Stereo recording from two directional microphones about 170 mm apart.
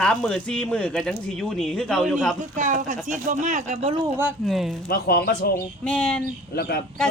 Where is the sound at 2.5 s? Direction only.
45° right (ahead or behind).